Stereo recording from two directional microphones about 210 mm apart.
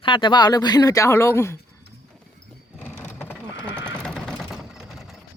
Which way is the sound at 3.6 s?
10° right (ahead or behind).